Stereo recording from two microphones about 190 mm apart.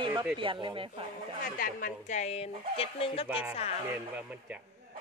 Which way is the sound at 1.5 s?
45° left (ahead or behind).